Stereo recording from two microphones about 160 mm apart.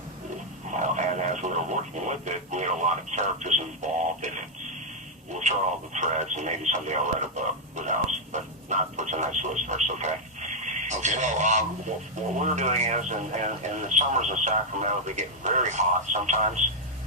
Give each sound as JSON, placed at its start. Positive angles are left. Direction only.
{"t": 0.7, "sound": "radio", "side_deg": -50}
{"t": 5.3, "sound": "speech", "side_deg": -45}
{"t": 7.8, "sound": "radio", "side_deg": -50}
{"t": 12.4, "sound": "speech", "side_deg": -50}